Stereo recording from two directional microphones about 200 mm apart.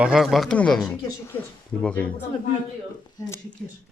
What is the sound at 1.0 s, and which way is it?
Speech, 20° left (ahead or behind).